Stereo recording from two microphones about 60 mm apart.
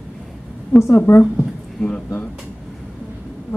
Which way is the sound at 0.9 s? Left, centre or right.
Left.